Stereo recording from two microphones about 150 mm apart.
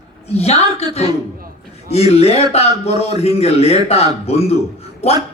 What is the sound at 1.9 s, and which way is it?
A man's voice, 45° left (ahead or behind).